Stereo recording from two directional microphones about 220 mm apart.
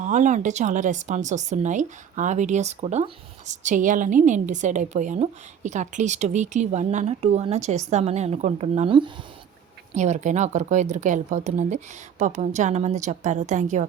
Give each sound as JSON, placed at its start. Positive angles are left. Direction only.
{"t": 0.0, "sound": "speech", "side_deg": -35}